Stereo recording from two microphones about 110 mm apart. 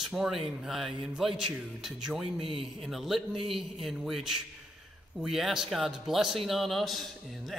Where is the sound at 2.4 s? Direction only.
55° right (ahead or behind).